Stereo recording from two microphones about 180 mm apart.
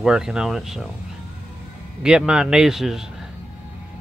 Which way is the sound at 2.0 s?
5° right (ahead or behind).